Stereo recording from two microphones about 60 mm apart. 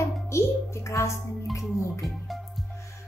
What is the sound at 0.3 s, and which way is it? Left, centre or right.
Music, left.